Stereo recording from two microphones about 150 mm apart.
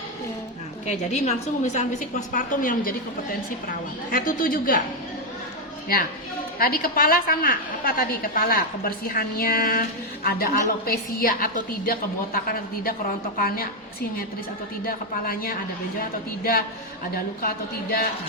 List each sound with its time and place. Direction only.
0.9 s a woman's voice: 50° left (ahead or behind)
4.1 s a woman's voice: 70° left (ahead or behind)
6.6 s a woman's voice: 80° left
10.2 s a woman's voice: 85° left
14.8 s a woman's voice: 75° left (ahead or behind)